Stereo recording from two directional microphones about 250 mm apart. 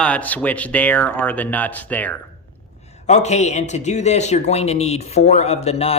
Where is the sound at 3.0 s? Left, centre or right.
Left.